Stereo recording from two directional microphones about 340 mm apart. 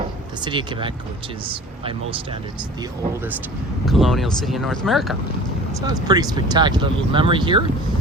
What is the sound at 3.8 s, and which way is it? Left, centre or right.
Speech, centre.